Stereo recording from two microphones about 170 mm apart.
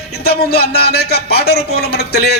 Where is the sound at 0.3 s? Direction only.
70° left (ahead or behind).